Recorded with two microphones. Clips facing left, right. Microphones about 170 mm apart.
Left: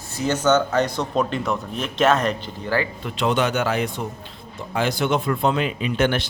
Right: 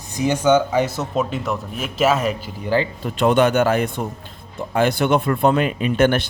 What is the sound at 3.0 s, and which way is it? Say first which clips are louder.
Speech: right 8 dB; 50° right (ahead or behind).